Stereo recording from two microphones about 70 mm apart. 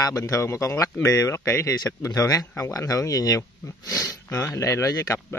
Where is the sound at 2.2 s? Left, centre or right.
Left.